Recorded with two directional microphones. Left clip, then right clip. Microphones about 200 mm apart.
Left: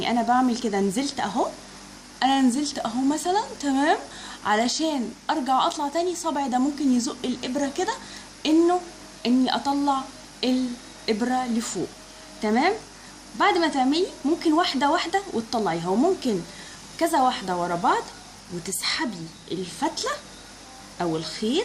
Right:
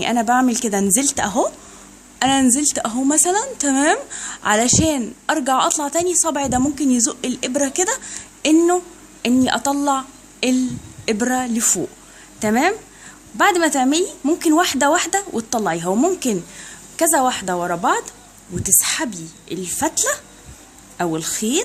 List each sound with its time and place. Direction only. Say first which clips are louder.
0.0 s a woman's voice: right 5 dB; 50° right (ahead or behind)